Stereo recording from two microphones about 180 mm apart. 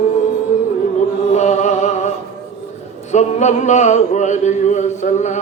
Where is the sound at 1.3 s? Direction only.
40° left (ahead or behind).